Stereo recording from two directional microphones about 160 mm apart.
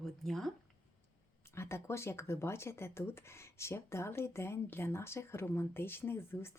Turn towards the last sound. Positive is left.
turn(degrees=15)  # may be behind; listen again after turning